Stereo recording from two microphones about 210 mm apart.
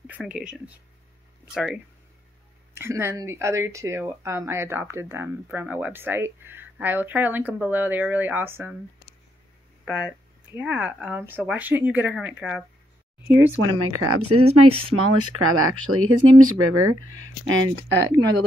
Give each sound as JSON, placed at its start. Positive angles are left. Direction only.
{"t": 0.0, "sound": "speech", "side_deg": -5}
{"t": 9.8, "sound": "speech", "side_deg": -5}
{"t": 13.6, "sound": "speech", "side_deg": -85}
{"t": 14.2, "sound": "speech", "side_deg": -25}
{"t": 14.9, "sound": "speech", "side_deg": -90}
{"t": 17.2, "sound": "speech", "side_deg": -70}